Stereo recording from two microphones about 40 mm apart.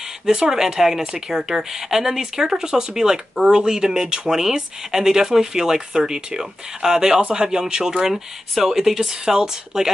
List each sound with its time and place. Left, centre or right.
0.3 s speech: centre
8.1 s speech: centre